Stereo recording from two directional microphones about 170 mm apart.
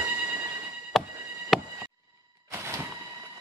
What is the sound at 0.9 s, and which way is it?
Chop, centre (ahead or behind).